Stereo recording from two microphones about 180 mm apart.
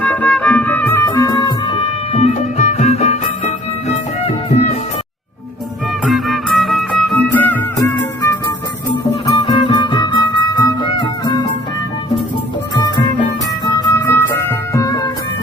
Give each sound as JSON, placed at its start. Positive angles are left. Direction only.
{"t": 0.0, "sound": "music", "side_deg": 10}
{"t": 6.1, "sound": "music", "side_deg": 0}
{"t": 9.3, "sound": "music", "side_deg": 25}
{"t": 12.7, "sound": "music", "side_deg": 25}
{"t": 13.7, "sound": "music", "side_deg": 15}